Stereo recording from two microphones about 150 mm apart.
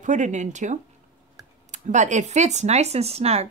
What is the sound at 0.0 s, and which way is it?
Speech, 55° right (ahead or behind).